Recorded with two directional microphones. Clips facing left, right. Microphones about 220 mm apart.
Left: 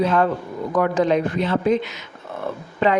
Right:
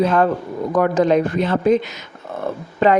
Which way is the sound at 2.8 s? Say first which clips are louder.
Right 4 dB; 40° right (ahead or behind).